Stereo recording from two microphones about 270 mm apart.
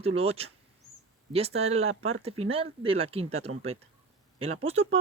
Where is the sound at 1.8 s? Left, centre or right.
Right.